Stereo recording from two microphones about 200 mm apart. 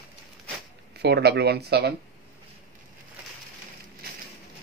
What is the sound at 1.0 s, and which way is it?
Speech, 55° right (ahead or behind).